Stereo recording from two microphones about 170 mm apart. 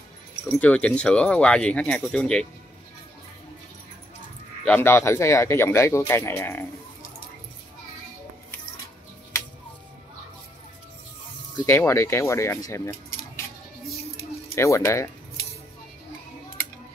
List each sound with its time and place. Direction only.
0.5 s speech: 10° left (ahead or behind)
4.6 s speech: 10° left (ahead or behind)
11.6 s speech: 15° left (ahead or behind)
14.5 s speech: 15° left (ahead or behind)